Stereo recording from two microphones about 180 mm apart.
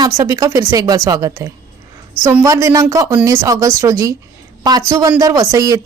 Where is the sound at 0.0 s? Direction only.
20° right (ahead or behind).